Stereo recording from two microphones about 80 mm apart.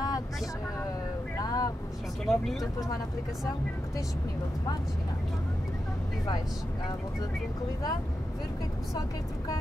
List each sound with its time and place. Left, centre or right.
1.4 s vehicle: left
2.2 s speech: centre